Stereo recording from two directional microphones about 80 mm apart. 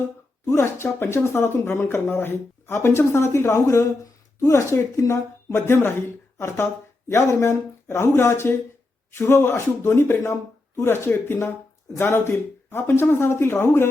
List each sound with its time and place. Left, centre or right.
0.4 s speech: left
5.5 s speech: left